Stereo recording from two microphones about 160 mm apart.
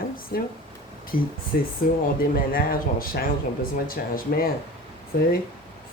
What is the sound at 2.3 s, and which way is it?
Speech, 65° left (ahead or behind).